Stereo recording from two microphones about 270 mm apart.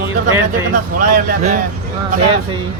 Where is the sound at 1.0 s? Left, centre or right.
Right.